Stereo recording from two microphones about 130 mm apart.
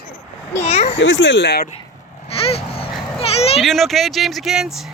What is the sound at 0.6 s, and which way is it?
Speech, 55° left (ahead or behind).